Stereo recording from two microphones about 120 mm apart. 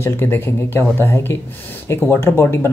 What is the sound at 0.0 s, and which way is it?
Speech, 20° left (ahead or behind).